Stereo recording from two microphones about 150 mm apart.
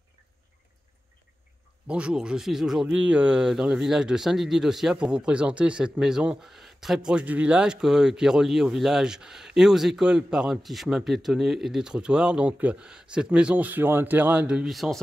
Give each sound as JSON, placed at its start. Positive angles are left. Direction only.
{"t": 1.9, "sound": "speech", "side_deg": -5}